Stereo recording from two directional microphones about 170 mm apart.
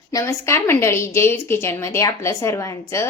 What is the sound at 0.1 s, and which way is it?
A woman's voice, 20° left (ahead or behind).